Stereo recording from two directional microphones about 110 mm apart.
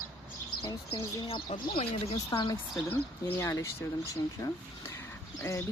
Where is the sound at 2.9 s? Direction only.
20° left (ahead or behind).